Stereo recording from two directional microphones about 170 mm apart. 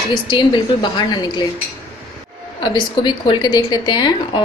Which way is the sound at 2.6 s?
25° left (ahead or behind).